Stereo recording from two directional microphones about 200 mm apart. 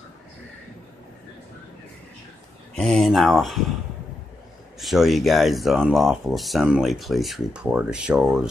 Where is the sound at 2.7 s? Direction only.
Centre (ahead or behind).